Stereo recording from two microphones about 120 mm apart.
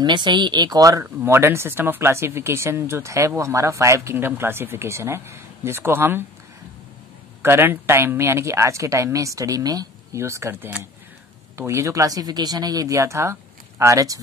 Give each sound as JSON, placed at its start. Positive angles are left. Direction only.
{"t": 0.0, "sound": "speech", "side_deg": -40}
{"t": 7.4, "sound": "speech", "side_deg": -20}